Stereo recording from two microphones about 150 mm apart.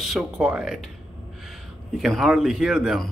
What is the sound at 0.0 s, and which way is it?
Speech, 5° right (ahead or behind).